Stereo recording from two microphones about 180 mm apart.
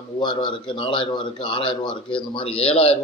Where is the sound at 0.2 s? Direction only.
25° left (ahead or behind).